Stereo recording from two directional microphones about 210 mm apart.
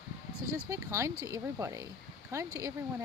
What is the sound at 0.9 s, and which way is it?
Speech, 15° right (ahead or behind).